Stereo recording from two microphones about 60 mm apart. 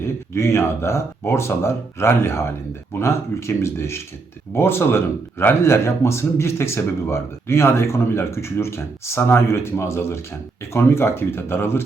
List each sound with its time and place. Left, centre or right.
0.0 s speech: left